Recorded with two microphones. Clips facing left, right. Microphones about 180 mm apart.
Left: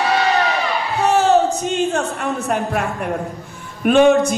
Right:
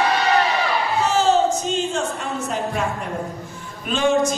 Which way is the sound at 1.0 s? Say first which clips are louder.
Left 4 dB; 60° left (ahead or behind).